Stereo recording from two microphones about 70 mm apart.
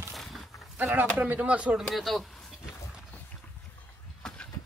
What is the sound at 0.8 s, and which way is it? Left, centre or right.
Speech, right.